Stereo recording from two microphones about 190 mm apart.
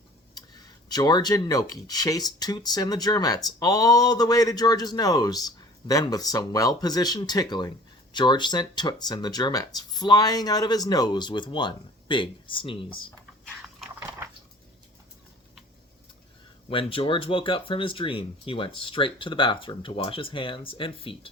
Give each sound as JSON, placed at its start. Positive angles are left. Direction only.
{"t": 0.3, "sound": "speech", "side_deg": 20}
{"t": 13.6, "sound": "a sound", "side_deg": -5}
{"t": 16.6, "sound": "speech", "side_deg": 30}